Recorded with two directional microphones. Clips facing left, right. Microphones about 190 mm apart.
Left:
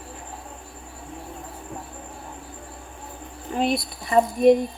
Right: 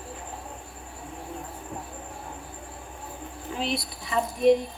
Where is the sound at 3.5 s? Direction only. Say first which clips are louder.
Left 7 dB; 50° left (ahead or behind).